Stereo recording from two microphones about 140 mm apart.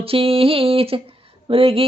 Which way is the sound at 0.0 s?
40° right (ahead or behind).